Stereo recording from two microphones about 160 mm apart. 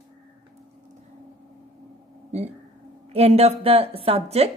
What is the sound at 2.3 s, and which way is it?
A woman's voice, 45° right (ahead or behind).